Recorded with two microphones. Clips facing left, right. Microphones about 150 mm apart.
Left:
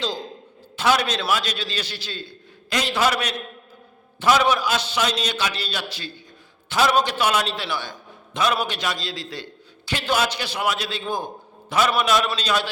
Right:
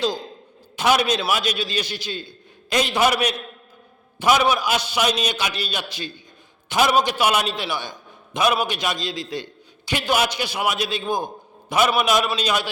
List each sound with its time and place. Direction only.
0.8 s a man's voice: 15° right (ahead or behind)